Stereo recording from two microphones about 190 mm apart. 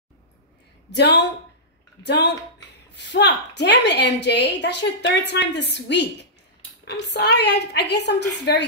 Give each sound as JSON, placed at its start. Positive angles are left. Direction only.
{"t": 0.9, "sound": "a woman's voice", "side_deg": 65}